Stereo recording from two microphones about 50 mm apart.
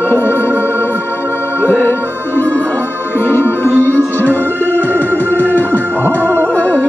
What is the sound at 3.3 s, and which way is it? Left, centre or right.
Music, left.